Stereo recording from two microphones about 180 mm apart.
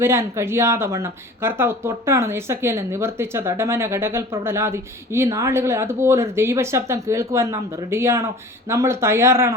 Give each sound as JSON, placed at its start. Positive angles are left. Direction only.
{"t": 0.0, "sound": "speech", "side_deg": -15}